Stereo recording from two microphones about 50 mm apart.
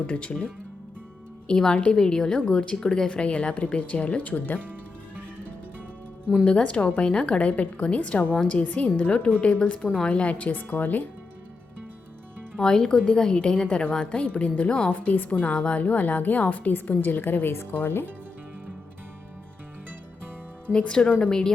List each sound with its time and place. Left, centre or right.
0.1 s a woman's voice: left
4.6 s music: right
6.4 s a woman's voice: left
12.5 s a woman's voice: centre
15.1 s a woman's voice: left
15.4 s a woman's voice: left
20.7 s a woman's voice: centre